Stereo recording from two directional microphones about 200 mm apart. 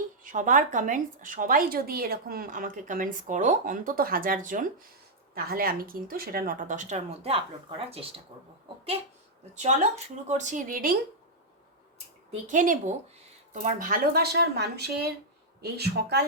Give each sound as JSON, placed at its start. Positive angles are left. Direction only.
{"t": 0.3, "sound": "a woman's voice", "side_deg": -40}
{"t": 9.6, "sound": "a woman's voice", "side_deg": -35}
{"t": 12.3, "sound": "a woman's voice", "side_deg": -40}